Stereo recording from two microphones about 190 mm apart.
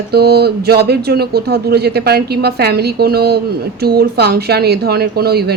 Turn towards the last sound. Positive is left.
turn(degrees=-55)  # may be behind; listen again after turning